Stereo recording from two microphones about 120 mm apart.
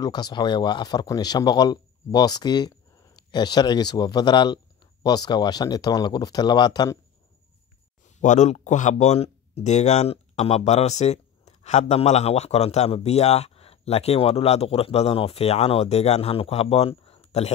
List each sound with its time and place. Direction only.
0.0 s a man's voice: 35° left (ahead or behind)
8.2 s speech: 85° left; by 17.5 s 60° left (ahead or behind)